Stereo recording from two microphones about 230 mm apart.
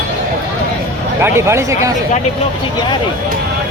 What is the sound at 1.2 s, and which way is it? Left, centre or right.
Speech, centre.